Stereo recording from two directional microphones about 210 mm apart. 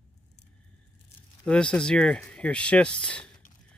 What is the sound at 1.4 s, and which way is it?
Speech, 5° left (ahead or behind).